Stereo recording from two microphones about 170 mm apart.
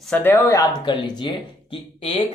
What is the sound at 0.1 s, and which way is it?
Speech, 10° left (ahead or behind).